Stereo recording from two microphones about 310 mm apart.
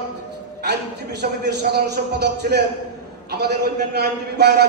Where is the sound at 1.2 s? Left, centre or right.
Right.